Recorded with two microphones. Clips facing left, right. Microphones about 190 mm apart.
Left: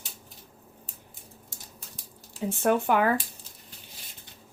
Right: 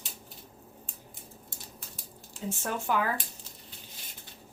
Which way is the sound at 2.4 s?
60° left (ahead or behind).